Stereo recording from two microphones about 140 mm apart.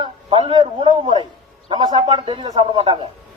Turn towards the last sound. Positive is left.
turn(degrees=-40)  # may be behind; listen again after turning